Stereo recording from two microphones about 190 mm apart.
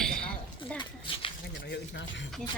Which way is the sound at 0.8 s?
25° left (ahead or behind).